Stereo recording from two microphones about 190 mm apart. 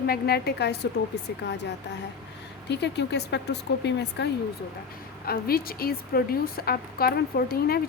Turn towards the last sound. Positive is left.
turn(degrees=55)  # may be behind; listen again after turning